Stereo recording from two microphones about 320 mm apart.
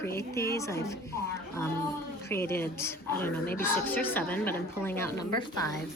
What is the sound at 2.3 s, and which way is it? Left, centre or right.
A woman's voice, centre.